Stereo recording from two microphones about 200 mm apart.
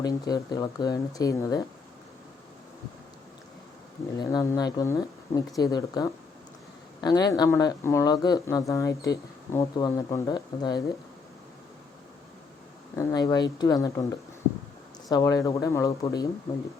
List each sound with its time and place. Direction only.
0.0 s speech: 20° left (ahead or behind)
4.2 s speech: 20° left (ahead or behind)
13.0 s speech: 20° left (ahead or behind)